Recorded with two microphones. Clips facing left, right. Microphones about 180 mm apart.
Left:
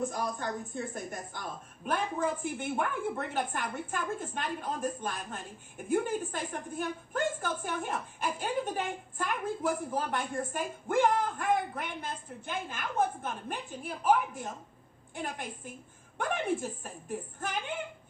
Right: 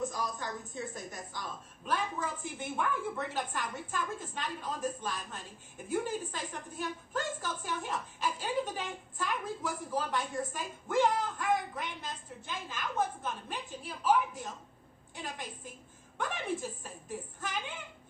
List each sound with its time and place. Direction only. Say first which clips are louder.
0.0 s a woman's voice: left 3 dB; 55° left (ahead or behind)